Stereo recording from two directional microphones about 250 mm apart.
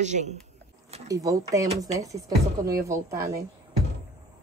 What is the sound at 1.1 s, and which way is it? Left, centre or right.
Speech, centre.